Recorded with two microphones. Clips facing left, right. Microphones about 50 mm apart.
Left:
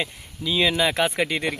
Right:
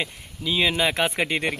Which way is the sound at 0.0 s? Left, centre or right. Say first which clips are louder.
Left 1 dB; centre.